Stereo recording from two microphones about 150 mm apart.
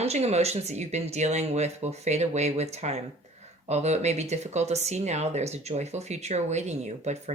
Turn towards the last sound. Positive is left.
turn(degrees=-50)  # may be behind; listen again after turning